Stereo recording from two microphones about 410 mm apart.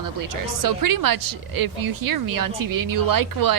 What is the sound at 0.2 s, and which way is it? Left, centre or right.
Speech, right.